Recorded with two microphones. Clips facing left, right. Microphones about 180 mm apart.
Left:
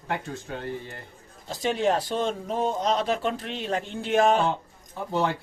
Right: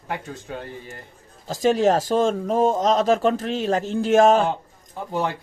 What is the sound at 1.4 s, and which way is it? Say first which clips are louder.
Speech: right 6 dB; 45° right (ahead or behind).